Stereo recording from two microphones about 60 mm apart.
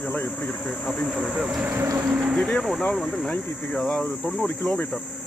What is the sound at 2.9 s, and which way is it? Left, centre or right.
Speech, centre.